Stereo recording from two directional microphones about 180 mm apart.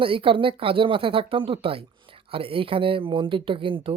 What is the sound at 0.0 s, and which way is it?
Speech, 30° right (ahead or behind).